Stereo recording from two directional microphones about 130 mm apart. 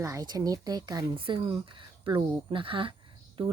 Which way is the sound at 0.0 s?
25° right (ahead or behind).